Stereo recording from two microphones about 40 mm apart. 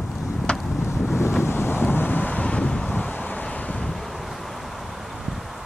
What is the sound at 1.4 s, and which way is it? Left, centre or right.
Wind noise, left.